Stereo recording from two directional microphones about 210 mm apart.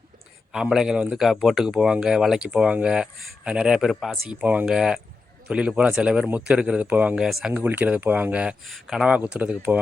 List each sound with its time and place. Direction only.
0.5 s speech: 5° right (ahead or behind)